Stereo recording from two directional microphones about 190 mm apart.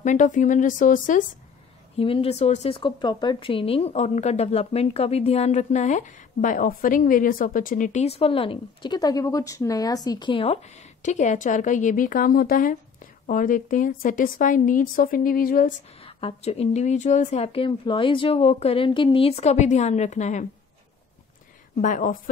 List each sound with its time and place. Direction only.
0.0 s a woman's voice: 40° left (ahead or behind)
2.0 s a woman's voice: 30° left (ahead or behind); by 15.7 s 50° left (ahead or behind)
16.0 s speech: 30° left (ahead or behind)
21.7 s a woman's voice: 45° left (ahead or behind)